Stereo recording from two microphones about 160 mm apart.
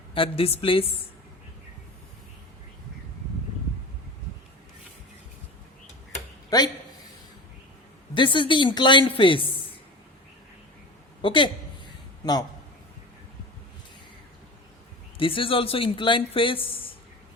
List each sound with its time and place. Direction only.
0.1 s speech: 35° left (ahead or behind)
8.1 s speech: 30° left (ahead or behind)
11.2 s a man's voice: 30° left (ahead or behind)
15.2 s speech: 35° left (ahead or behind)